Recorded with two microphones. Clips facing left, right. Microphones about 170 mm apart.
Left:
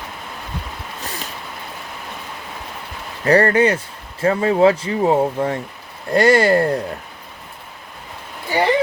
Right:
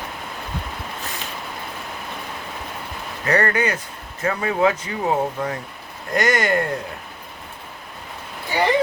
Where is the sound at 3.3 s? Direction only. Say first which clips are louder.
Left 6 dB; 30° left (ahead or behind).